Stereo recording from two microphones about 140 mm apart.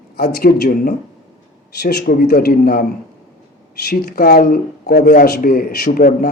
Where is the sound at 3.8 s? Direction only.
90° left.